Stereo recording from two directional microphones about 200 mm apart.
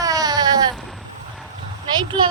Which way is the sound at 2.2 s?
20° right (ahead or behind).